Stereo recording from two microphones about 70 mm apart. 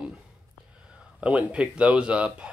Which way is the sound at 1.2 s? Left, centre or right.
Centre.